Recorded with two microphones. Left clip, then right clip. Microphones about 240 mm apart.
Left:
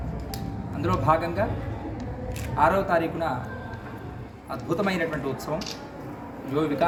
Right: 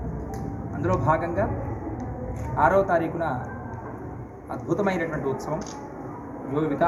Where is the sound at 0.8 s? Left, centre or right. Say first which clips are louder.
Even; centre.